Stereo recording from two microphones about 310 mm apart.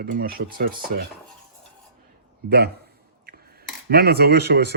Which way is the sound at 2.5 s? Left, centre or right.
Right.